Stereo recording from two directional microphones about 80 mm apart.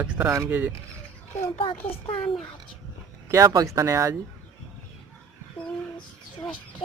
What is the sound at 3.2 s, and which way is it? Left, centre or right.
Speech, right.